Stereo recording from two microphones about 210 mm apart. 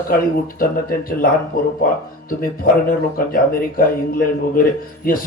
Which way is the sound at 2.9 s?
45° left (ahead or behind).